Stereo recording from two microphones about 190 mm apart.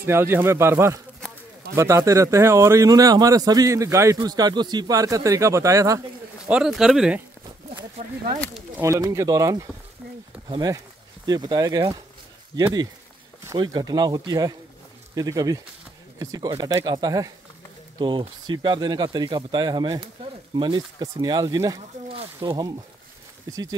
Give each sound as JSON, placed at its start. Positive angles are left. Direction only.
{"t": 0.0, "sound": "speech", "side_deg": -10}
{"t": 6.4, "sound": "speech", "side_deg": -5}
{"t": 8.7, "sound": "speech", "side_deg": -15}